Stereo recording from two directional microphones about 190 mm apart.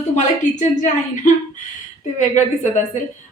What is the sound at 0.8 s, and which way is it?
A woman's voice, 40° left (ahead or behind).